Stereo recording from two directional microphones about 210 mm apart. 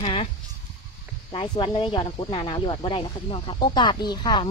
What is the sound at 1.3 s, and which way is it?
Speech, 25° left (ahead or behind).